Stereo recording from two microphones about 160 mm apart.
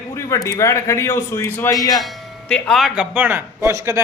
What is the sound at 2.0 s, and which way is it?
Speech, 5° left (ahead or behind).